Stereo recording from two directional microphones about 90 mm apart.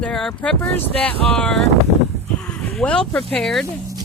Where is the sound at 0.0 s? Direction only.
5° left (ahead or behind).